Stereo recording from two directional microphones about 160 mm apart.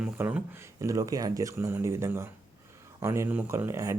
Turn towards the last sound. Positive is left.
turn(degrees=-15)  # may be behind; listen again after turning